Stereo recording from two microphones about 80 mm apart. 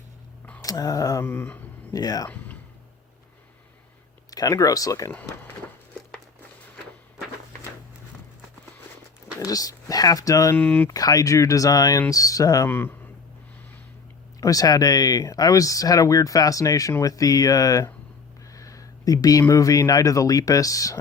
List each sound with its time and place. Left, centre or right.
0.6 s speech: left
1.2 s a sound: left
1.9 s speech: left
4.3 s speech: left
9.5 s speech: left
10.6 s speech: centre
10.8 s speech: left
12.6 s a sound: left
14.4 s speech: left